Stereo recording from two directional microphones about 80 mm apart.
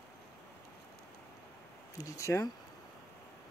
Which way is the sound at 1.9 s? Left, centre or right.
Left.